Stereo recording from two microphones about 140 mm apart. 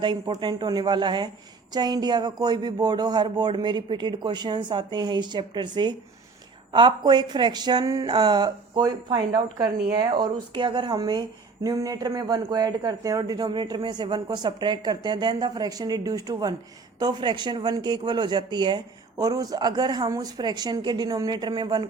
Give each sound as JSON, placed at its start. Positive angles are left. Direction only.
{"t": 0.3, "sound": "speech", "side_deg": -30}